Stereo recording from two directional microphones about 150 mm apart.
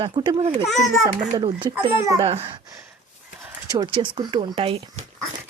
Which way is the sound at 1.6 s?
25° right (ahead or behind).